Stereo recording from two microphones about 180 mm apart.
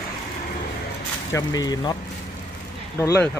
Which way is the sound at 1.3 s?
20° left (ahead or behind).